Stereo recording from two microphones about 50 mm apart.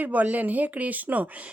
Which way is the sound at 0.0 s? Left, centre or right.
Right.